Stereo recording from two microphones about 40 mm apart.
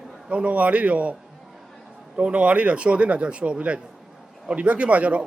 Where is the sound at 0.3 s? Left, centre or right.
Right.